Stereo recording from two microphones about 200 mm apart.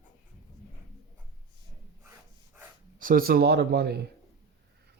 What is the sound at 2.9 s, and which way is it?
Speech, 45° right (ahead or behind).